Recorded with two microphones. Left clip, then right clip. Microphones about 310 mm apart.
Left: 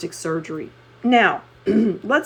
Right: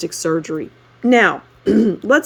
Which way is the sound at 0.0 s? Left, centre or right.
Right.